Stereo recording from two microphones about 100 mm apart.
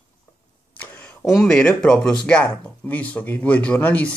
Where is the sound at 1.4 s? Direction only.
10° left (ahead or behind).